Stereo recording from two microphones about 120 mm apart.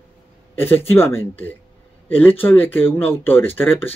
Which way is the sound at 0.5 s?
15° left (ahead or behind).